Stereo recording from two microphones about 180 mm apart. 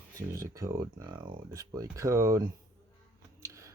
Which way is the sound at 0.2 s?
15° right (ahead or behind).